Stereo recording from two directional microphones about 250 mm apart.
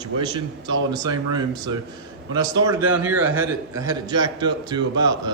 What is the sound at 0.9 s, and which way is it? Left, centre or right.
A man's voice, centre.